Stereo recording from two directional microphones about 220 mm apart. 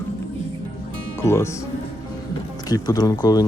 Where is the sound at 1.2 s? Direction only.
10° left (ahead or behind).